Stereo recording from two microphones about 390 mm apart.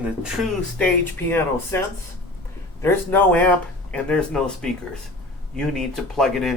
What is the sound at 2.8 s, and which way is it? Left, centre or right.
Speech, centre.